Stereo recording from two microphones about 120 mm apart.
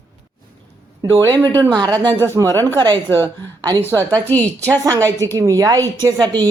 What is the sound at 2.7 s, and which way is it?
Speech, 40° right (ahead or behind).